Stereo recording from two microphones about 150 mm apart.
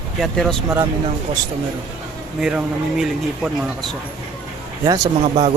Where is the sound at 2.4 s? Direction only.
5° right (ahead or behind).